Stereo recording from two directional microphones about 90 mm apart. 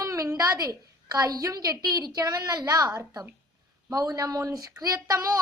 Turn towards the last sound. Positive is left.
turn(degrees=-45)  # may be behind; listen again after turning